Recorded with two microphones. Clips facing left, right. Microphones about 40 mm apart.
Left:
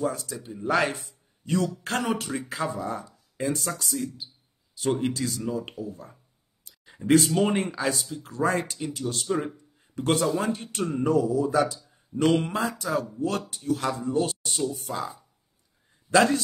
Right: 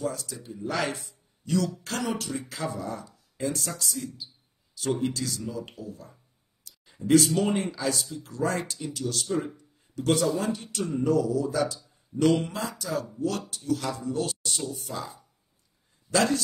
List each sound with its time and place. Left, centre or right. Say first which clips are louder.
0.0 s speech: left 3 dB; left
6.6 s a sound: right 1 dB; left
7.1 s a man's voice: left 1 dB; left
14.9 s speech: left 4 dB; centre
16.1 s a man's voice: left 4 dB; left